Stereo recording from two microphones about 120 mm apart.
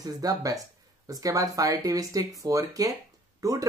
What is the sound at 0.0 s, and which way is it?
Speech, 30° right (ahead or behind).